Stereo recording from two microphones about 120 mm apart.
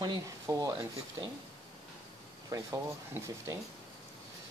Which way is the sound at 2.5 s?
25° right (ahead or behind).